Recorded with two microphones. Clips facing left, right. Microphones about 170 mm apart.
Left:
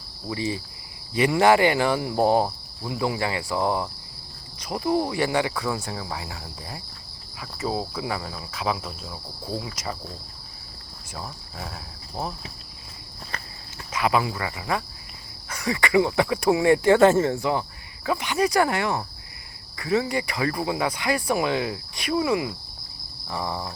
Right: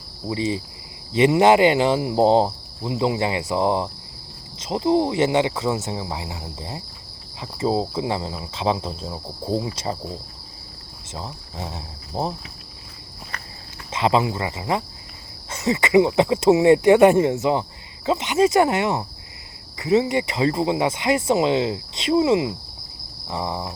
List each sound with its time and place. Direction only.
0.3 s speech: 20° right (ahead or behind)
11.1 s speech: 25° right (ahead or behind)
13.9 s speech: 25° right (ahead or behind)